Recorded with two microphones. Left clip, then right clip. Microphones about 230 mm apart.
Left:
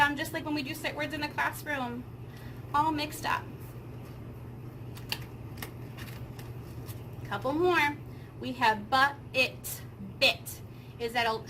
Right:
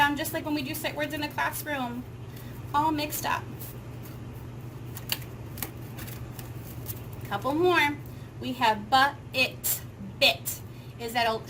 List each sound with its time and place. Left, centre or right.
0.0 s speech: centre
7.3 s a woman's voice: centre
11.0 s speech: centre